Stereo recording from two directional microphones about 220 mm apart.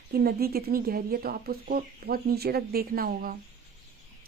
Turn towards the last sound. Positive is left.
turn(degrees=-40)  # may be behind; listen again after turning